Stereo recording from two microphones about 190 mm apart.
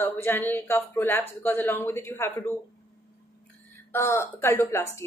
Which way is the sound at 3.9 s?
15° left (ahead or behind).